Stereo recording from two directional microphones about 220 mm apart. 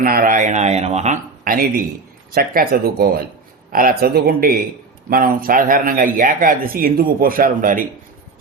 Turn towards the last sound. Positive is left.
turn(degrees=-40)  # may be behind; listen again after turning